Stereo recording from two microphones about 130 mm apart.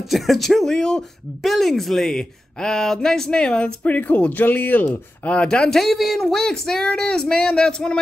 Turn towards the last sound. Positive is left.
turn(degrees=5)  # may be behind; listen again after turning